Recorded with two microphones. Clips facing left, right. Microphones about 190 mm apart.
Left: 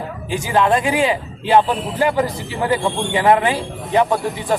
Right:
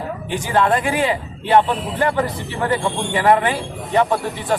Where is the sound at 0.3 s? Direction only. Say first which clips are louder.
Left 1 dB; 10° left (ahead or behind).